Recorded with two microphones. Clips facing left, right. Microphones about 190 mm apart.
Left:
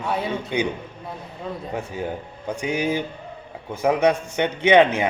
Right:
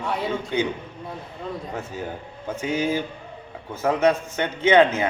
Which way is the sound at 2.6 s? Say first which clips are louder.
Even; 15° left (ahead or behind).